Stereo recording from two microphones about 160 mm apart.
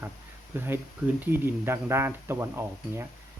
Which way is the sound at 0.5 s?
15° right (ahead or behind).